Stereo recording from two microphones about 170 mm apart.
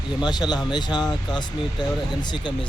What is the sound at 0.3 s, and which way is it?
Speech, 25° left (ahead or behind).